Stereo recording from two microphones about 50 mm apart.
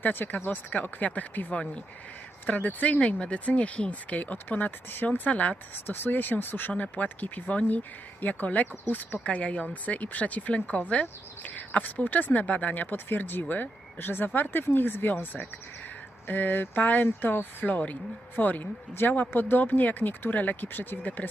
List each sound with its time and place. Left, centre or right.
0.0 s speech: left
5.7 s speech: left